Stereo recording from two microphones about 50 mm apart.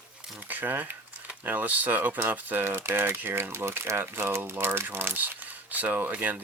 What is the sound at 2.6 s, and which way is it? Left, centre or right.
Speech, right.